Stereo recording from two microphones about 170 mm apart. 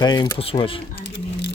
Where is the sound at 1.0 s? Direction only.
90° left.